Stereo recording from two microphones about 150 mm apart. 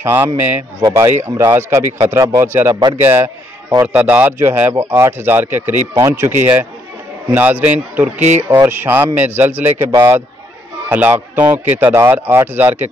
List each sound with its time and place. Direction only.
0.0 s speech: 15° right (ahead or behind)
2.7 s speech: 35° right (ahead or behind)
3.7 s a man's voice: 15° right (ahead or behind)